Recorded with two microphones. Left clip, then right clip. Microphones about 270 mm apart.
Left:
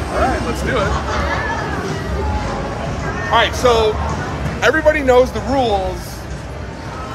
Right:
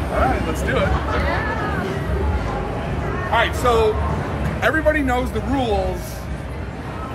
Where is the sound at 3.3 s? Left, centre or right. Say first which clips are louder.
Left 4 dB; left.